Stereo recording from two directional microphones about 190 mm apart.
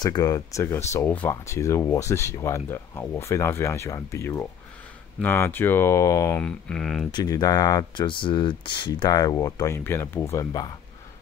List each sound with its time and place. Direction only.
0.0 s speech: 20° left (ahead or behind)
6.4 s speech: 5° left (ahead or behind)
7.1 s speech: 20° left (ahead or behind)